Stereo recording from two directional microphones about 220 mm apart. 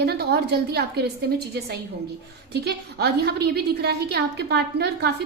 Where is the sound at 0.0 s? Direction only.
50° right (ahead or behind).